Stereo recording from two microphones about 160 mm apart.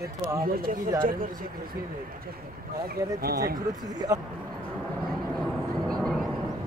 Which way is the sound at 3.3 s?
70° right (ahead or behind).